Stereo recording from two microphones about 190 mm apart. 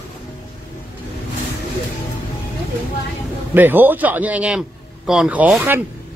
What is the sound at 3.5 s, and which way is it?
A man's voice, 10° right (ahead or behind).